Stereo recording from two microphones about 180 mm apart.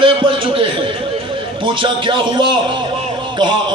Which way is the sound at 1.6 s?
30° right (ahead or behind).